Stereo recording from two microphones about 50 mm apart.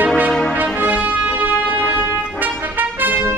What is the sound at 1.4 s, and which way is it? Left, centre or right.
Music, right.